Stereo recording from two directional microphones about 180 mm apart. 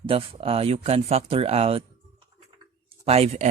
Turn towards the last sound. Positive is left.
turn(degrees=-35)  # may be behind; listen again after turning